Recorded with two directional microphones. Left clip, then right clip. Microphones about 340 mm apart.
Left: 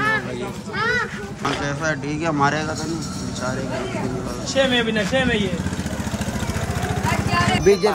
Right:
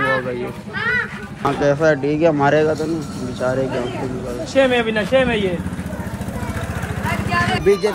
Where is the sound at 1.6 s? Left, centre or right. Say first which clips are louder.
Right 9 dB; centre.